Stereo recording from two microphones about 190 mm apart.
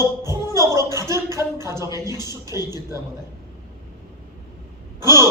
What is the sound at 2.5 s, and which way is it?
Speech, 20° left (ahead or behind).